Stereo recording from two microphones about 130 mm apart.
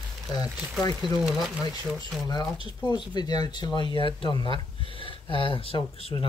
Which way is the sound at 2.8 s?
35° left (ahead or behind).